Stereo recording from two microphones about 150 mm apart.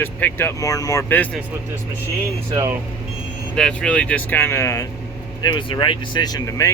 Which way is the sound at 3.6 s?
5° left (ahead or behind).